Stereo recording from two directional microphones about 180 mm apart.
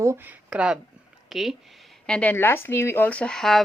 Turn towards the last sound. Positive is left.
turn(degrees=0)  # may be behind; listen again after turning